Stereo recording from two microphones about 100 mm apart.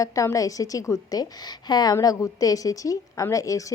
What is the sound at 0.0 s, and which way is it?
A woman's voice, 35° left (ahead or behind).